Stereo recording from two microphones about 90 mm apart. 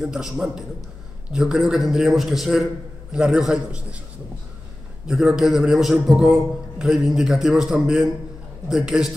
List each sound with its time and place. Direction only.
0.0 s a man's voice: 5° right (ahead or behind)
5.0 s a man's voice: 5° right (ahead or behind)